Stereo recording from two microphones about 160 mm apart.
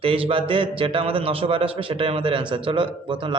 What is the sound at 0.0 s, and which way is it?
A man's voice, 35° right (ahead or behind).